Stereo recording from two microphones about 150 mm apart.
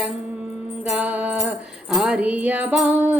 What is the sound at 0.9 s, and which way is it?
Music, 10° right (ahead or behind).